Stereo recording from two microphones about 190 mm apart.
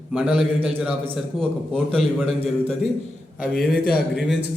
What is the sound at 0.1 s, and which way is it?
A man's voice, 5° right (ahead or behind).